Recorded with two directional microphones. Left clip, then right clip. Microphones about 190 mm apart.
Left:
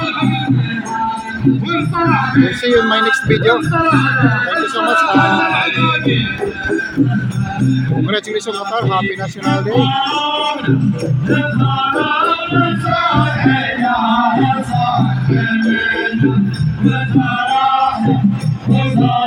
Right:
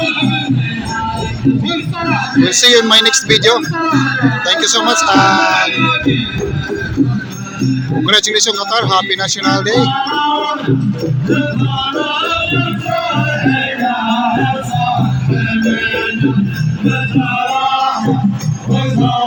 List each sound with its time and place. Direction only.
0.0 s music: 45° right (ahead or behind)
2.0 s a sound: 25° right (ahead or behind)
2.6 s speech: 10° right (ahead or behind)
8.0 s speech: 5° right (ahead or behind)
9.7 s music: 20° left (ahead or behind)
11.9 s music: 15° right (ahead or behind); by 17.5 s 30° right (ahead or behind)
17.7 s music: 15° right (ahead or behind)